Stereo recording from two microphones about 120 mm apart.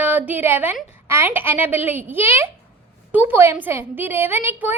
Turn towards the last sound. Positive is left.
turn(degrees=-15)  # may be behind; listen again after turning